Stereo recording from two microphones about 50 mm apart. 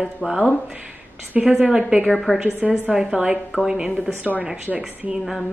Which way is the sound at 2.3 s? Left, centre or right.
Left.